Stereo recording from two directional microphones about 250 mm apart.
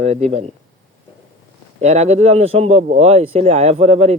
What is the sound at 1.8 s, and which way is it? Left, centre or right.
Speech, right.